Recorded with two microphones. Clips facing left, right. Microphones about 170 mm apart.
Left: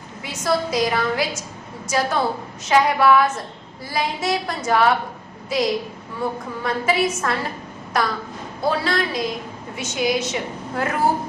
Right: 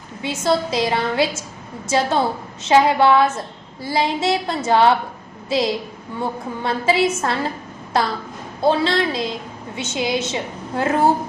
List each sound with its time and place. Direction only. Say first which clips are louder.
0.2 s a woman's voice: right 3 dB; 25° right (ahead or behind)